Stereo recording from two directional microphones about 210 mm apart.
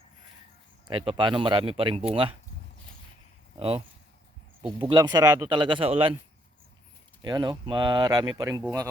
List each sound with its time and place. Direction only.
0.9 s speech: 25° right (ahead or behind)
3.6 s speech: 25° right (ahead or behind)
7.2 s speech: 20° right (ahead or behind)